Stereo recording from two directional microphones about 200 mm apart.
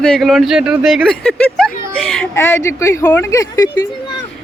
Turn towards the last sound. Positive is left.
turn(degrees=15)  # may be behind; listen again after turning